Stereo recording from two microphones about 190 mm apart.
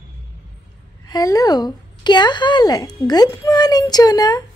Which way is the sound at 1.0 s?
20° left (ahead or behind).